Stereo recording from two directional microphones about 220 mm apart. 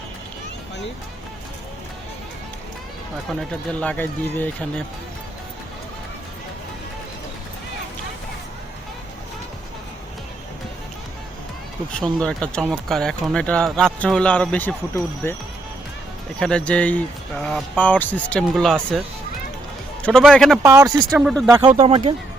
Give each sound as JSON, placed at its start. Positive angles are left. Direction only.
{"t": 3.8, "sound": "speech", "side_deg": 5}
{"t": 11.9, "sound": "speech", "side_deg": 0}
{"t": 16.4, "sound": "speech", "side_deg": 5}
{"t": 20.6, "sound": "speech", "side_deg": -15}
{"t": 21.1, "sound": "speech", "side_deg": 0}
{"t": 21.8, "sound": "speech", "side_deg": -25}